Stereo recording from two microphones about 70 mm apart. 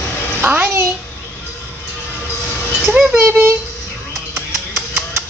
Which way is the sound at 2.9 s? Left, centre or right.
Right.